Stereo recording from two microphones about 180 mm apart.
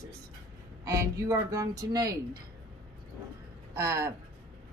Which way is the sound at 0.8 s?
15° right (ahead or behind).